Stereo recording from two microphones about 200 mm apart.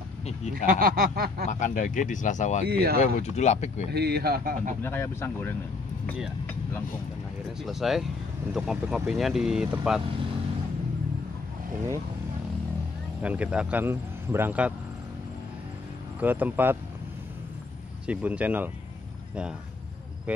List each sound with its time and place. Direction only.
0.7 s speech: 45° right (ahead or behind)
1.5 s speech: 40° left (ahead or behind)
2.6 s speech: 50° right (ahead or behind)
3.0 s speech: 35° left (ahead or behind)
3.9 s speech: 50° right (ahead or behind)
4.8 s speech: 10° left (ahead or behind)
7.6 s speech: centre (ahead or behind)
13.2 s a man's voice: 5° right (ahead or behind)
16.2 s a man's voice: 10° right (ahead or behind)
18.0 s a man's voice: 5° right (ahead or behind)
20.3 s a man's voice: 5° right (ahead or behind)